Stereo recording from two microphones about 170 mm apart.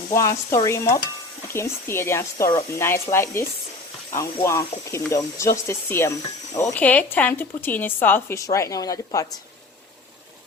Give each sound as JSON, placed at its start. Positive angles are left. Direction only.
{"t": 0.1, "sound": "speech", "side_deg": 15}